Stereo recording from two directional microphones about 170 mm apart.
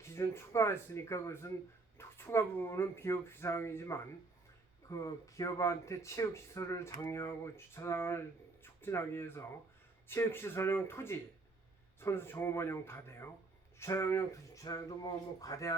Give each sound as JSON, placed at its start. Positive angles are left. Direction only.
{"t": 0.0, "sound": "speech", "side_deg": 15}